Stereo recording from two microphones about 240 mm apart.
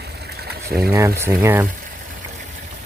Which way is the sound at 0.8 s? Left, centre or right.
Centre.